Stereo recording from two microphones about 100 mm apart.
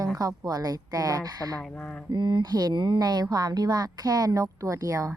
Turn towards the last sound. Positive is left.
turn(degrees=-35)  # may be behind; listen again after turning